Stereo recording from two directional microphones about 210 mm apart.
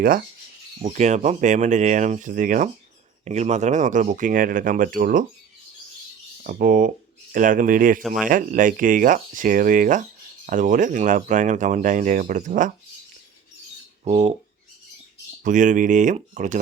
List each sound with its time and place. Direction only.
0.8 s speech: 30° right (ahead or behind)
6.4 s speech: 40° right (ahead or behind)
8.0 s speech: centre (ahead or behind)
8.3 s speech: 40° right (ahead or behind)
14.0 s speech: 30° right (ahead or behind)
15.4 s speech: 35° right (ahead or behind)